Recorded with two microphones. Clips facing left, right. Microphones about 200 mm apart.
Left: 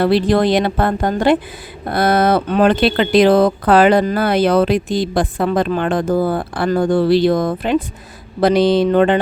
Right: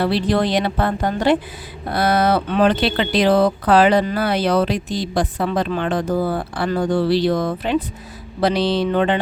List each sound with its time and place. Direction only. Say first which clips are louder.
0.0 s speech: left 5 dB; 50° left (ahead or behind)